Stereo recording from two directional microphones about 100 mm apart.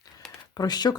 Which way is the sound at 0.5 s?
45° left (ahead or behind).